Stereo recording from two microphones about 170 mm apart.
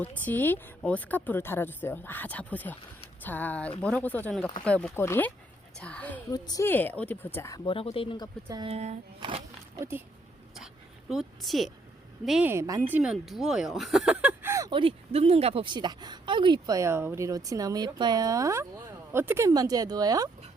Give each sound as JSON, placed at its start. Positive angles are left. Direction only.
{"t": 0.0, "sound": "speech", "side_deg": 10}
{"t": 6.3, "sound": "speech", "side_deg": 20}
{"t": 8.4, "sound": "speech", "side_deg": -25}
{"t": 8.7, "sound": "speech", "side_deg": -40}
{"t": 11.1, "sound": "speech", "side_deg": 0}
{"t": 12.5, "sound": "speech", "side_deg": -15}
{"t": 14.7, "sound": "speech", "side_deg": -30}